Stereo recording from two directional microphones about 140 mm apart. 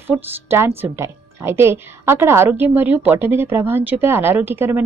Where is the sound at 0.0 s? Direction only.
15° right (ahead or behind).